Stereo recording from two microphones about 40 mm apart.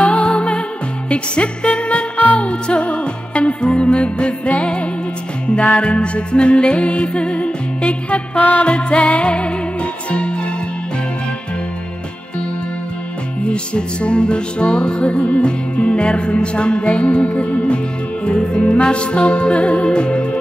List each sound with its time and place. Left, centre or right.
0.0 s music: left
8.4 s music: left
8.6 s music: left
13.5 s music: left